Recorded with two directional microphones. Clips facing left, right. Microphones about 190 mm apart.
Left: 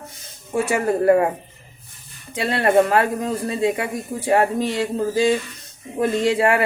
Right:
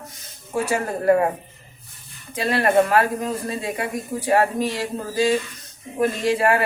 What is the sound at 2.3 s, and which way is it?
Speech, 25° left (ahead or behind).